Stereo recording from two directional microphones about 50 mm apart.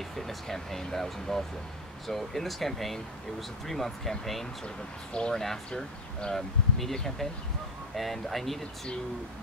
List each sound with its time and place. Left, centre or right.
0.1 s speech: centre
5.1 s speech: centre
5.4 s speech: centre